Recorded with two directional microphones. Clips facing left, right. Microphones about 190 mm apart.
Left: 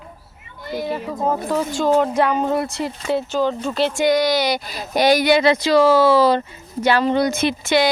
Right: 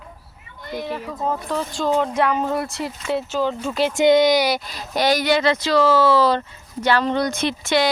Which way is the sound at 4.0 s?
20° right (ahead or behind).